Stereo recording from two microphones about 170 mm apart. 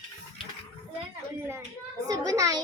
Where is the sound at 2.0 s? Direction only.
20° right (ahead or behind).